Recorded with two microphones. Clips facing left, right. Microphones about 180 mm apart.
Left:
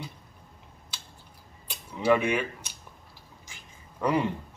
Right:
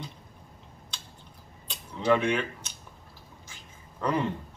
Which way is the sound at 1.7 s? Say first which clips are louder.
Left 1 dB; 10° left (ahead or behind).